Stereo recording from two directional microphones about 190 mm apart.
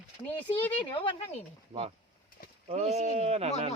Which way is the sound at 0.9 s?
25° left (ahead or behind).